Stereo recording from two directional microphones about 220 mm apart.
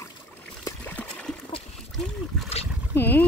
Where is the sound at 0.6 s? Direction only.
5° left (ahead or behind).